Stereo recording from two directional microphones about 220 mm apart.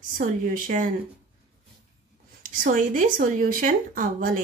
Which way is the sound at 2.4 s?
40° right (ahead or behind).